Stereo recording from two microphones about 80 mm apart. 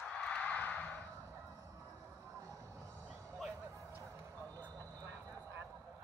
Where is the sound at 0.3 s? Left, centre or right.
Centre.